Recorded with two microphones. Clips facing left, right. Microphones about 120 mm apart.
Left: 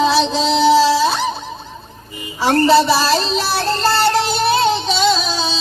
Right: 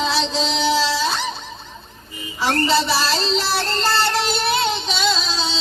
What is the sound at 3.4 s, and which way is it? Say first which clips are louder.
Music: left 4 dB; 10° left (ahead or behind).